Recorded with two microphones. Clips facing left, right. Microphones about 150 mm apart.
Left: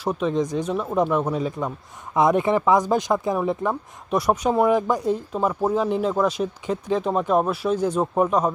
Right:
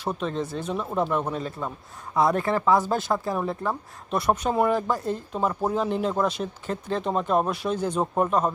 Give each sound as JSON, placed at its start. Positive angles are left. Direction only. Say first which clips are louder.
{"t": 0.0, "sound": "speech", "louder": "left 5 dB", "side_deg": 10}
{"t": 2.1, "sound": "speech", "louder": "left 4 dB", "side_deg": 20}